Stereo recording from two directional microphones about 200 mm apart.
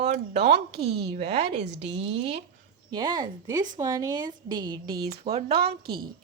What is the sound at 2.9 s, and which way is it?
Speech, 20° right (ahead or behind).